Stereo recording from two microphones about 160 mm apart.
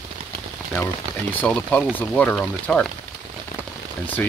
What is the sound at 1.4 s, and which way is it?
Speech, 10° left (ahead or behind).